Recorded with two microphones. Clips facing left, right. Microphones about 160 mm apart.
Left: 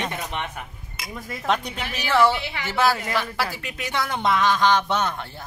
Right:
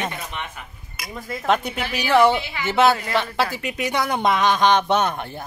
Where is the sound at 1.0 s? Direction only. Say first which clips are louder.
Right 1 dB; 25° left (ahead or behind).